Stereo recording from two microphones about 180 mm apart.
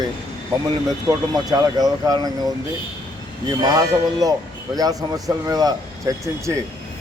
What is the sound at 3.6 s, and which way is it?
Speech, 20° right (ahead or behind).